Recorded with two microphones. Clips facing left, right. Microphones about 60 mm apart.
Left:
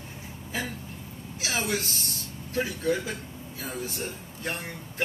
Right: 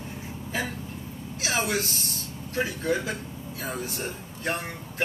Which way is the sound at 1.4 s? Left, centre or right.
Centre.